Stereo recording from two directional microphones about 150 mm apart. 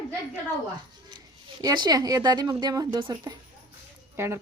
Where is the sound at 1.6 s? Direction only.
30° right (ahead or behind).